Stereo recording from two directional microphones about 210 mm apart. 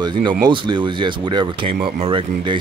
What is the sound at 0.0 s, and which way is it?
Speech, 20° right (ahead or behind).